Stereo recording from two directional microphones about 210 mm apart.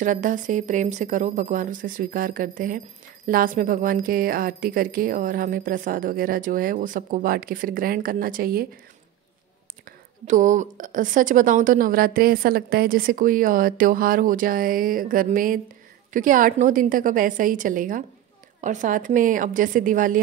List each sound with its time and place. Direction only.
0.0 s a woman's voice: 40° right (ahead or behind)
10.2 s a woman's voice: 40° right (ahead or behind)